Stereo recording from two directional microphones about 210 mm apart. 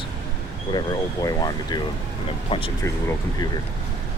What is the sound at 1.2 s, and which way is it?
Speech, 20° left (ahead or behind).